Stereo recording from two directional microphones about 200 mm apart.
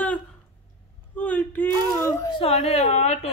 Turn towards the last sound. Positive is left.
turn(degrees=35)  # may be behind; listen again after turning